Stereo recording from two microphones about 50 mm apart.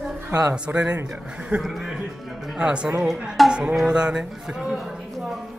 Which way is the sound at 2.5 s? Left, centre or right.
Centre.